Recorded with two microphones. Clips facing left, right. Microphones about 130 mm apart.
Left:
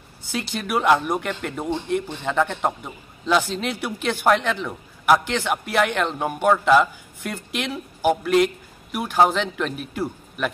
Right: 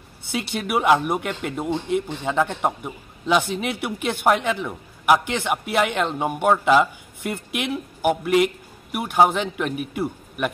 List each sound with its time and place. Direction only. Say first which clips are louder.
0.6 s a man's voice: right 1 dB; 15° right (ahead or behind)